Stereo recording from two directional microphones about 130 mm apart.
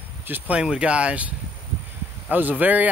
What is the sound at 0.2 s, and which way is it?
Speech, 15° right (ahead or behind).